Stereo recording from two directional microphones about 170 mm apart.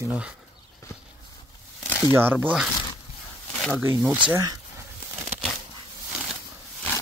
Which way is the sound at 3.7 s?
15° right (ahead or behind).